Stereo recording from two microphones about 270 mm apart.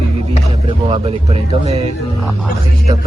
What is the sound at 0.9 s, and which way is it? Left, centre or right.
Speech, right.